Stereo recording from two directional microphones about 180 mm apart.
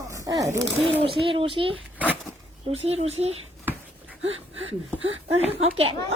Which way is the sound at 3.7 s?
10° right (ahead or behind).